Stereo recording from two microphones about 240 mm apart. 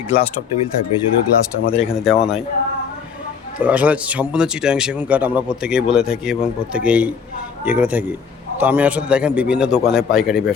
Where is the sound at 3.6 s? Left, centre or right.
Centre.